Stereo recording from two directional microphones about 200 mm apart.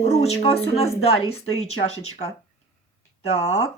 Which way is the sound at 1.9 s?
90° left.